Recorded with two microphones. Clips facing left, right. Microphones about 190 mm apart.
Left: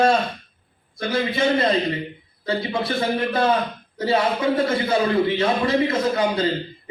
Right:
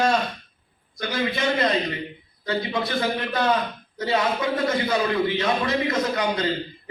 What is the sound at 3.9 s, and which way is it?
Speech, 30° left (ahead or behind).